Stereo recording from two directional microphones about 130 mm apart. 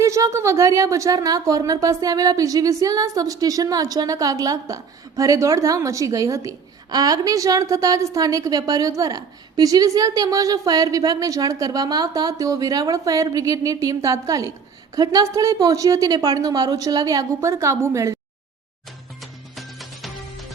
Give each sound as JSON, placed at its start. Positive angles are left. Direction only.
{"t": 0.0, "sound": "a woman's voice", "side_deg": -25}
{"t": 19.2, "sound": "music", "side_deg": 0}